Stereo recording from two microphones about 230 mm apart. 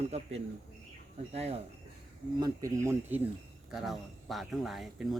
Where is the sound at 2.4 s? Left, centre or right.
Centre.